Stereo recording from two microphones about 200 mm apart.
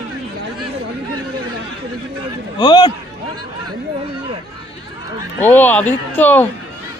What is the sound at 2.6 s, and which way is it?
Speech, 20° left (ahead or behind).